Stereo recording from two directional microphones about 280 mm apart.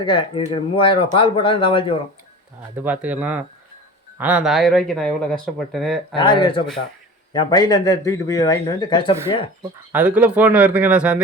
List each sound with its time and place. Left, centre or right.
0.0 s speech: centre
2.7 s speech: centre
6.1 s speech: centre
9.9 s speech: centre